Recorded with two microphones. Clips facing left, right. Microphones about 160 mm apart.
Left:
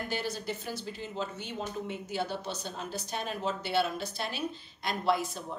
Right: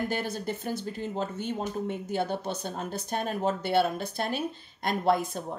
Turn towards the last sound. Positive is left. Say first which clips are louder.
# right 4 dB
turn(degrees=-50)  # may be behind; listen again after turning